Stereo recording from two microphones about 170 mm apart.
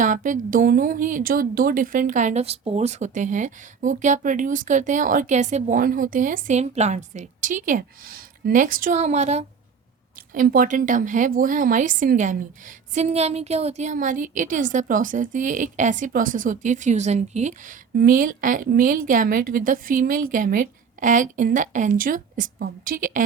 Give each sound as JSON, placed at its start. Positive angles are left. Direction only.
{"t": 0.0, "sound": "speech", "side_deg": -50}
{"t": 10.3, "sound": "speech", "side_deg": -55}
{"t": 17.9, "sound": "speech", "side_deg": -55}